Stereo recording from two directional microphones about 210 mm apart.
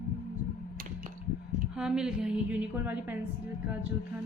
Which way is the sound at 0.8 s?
40° right (ahead or behind).